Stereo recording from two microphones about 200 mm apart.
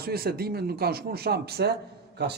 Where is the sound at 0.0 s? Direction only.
50° right (ahead or behind).